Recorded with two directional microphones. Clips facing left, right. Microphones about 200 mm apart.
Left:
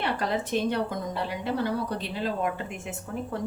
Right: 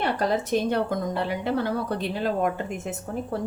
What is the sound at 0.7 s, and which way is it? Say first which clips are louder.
A woman's voice: right 4 dB; 50° right (ahead or behind).